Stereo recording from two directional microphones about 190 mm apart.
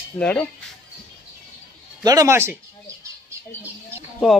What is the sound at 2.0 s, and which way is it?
Speech, 20° right (ahead or behind).